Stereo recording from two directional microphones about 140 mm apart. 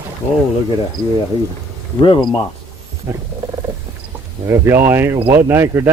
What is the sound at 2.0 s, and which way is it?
Speech, 35° left (ahead or behind).